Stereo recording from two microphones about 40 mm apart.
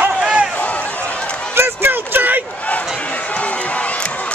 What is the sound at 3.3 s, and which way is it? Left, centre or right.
Run, left.